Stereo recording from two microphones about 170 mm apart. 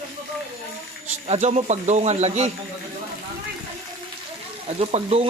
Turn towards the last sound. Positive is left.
turn(degrees=-35)  # may be behind; listen again after turning